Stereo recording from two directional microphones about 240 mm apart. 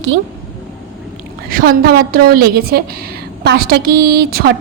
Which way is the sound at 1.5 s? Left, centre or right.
Right.